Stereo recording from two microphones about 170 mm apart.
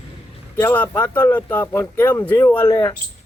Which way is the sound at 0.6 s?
10° left (ahead or behind).